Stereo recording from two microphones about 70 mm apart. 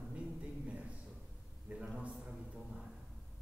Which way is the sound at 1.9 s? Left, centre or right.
Centre.